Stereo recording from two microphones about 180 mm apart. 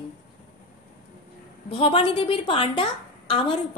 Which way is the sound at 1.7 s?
30° left (ahead or behind).